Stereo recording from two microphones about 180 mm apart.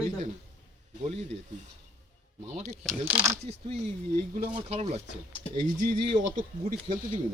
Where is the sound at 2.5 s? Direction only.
45° right (ahead or behind).